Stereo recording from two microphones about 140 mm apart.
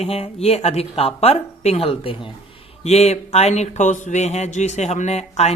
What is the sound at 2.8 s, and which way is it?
Speech, 50° left (ahead or behind).